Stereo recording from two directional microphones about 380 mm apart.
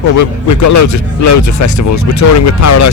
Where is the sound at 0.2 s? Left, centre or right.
Left.